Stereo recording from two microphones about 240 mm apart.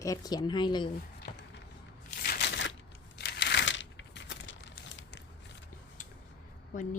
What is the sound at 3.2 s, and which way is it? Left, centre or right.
Crumpling, left.